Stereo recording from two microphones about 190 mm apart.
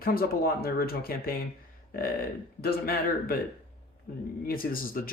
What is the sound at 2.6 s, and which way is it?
Speech, 50° left (ahead or behind).